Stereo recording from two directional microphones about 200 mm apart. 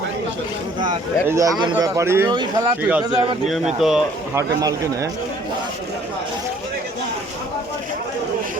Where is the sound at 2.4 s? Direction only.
25° right (ahead or behind).